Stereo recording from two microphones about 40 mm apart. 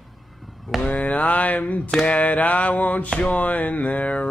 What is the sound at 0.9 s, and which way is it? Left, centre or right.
Speech, left.